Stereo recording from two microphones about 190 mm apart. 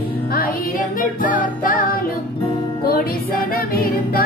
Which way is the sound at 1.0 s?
45° left (ahead or behind).